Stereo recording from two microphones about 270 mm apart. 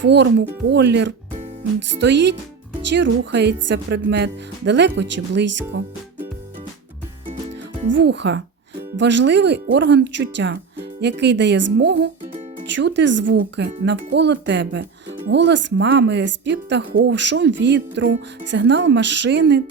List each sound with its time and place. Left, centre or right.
0.0 s speech: right
7.9 s speech: right
12.6 s speech: right